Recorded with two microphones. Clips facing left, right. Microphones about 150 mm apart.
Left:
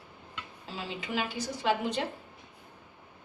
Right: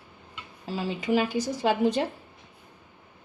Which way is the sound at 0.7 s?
45° right (ahead or behind).